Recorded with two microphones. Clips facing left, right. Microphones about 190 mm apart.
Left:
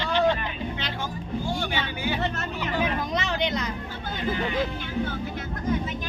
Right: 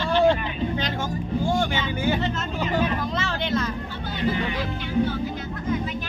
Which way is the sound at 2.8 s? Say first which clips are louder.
Right 2 dB; 15° left (ahead or behind).